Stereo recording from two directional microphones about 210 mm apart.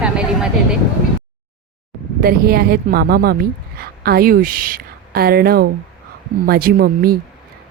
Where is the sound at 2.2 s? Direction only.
45° right (ahead or behind).